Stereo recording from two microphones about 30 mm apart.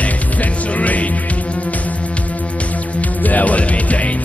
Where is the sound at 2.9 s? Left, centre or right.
Left.